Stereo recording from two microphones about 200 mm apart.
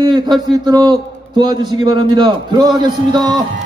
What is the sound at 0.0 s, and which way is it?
A man's voice, 20° right (ahead or behind).